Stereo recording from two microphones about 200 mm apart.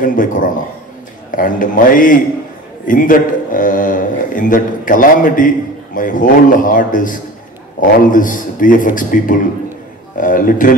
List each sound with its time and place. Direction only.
0.0 s a man's voice: 40° left (ahead or behind)